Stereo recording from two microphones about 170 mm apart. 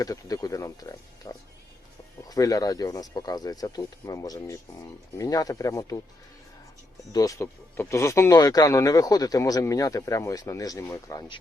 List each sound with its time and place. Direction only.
0.0 s speech: 20° left (ahead or behind)
7.1 s speech: 20° left (ahead or behind)